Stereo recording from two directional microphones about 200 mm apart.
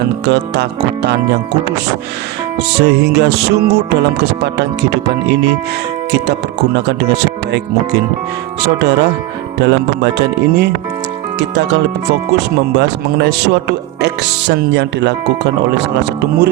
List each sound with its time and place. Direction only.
0.3 s speech: 55° right (ahead or behind)
2.6 s speech: 55° right (ahead or behind)
6.7 s speech: 55° right (ahead or behind)